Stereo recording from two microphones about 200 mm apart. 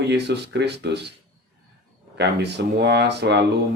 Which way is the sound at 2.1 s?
55° right (ahead or behind).